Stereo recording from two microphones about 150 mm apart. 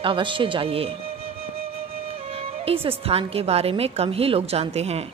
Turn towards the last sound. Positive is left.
turn(degrees=-45)  # may be behind; listen again after turning